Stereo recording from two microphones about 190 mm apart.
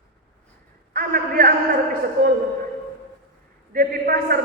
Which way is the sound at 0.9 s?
50° right (ahead or behind).